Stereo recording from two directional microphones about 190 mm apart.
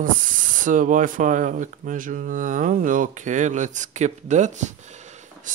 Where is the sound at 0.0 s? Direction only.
45° right (ahead or behind).